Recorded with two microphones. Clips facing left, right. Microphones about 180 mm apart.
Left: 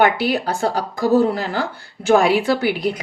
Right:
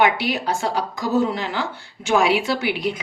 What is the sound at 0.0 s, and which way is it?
A woman's voice, 35° left (ahead or behind).